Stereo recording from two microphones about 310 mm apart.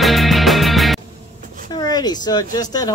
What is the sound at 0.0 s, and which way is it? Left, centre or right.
Music, centre.